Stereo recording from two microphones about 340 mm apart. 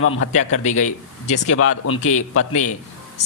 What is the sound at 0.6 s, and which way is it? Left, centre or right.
Speech, centre.